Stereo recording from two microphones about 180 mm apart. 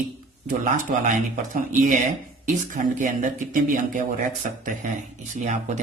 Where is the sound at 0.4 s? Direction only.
45° right (ahead or behind).